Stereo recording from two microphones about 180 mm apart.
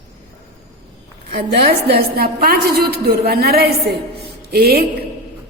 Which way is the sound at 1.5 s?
60° right (ahead or behind).